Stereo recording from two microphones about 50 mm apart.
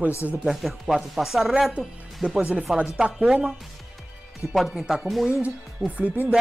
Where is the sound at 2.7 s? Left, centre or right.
Right.